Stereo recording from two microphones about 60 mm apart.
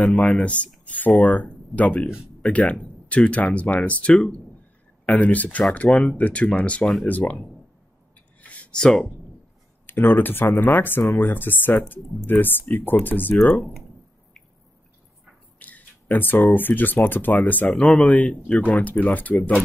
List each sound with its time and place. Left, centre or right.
0.2 s speech: left
8.4 s a sound: left
8.7 s speech: centre
9.8 s speech: left
15.6 s speech: left